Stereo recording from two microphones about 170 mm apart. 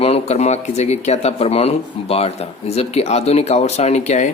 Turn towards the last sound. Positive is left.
turn(degrees=45)  # may be behind; listen again after turning